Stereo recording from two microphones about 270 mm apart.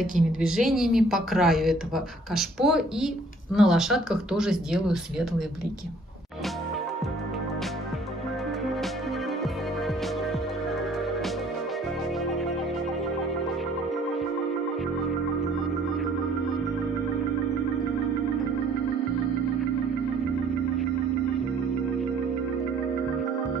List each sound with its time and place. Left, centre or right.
0.4 s speech: centre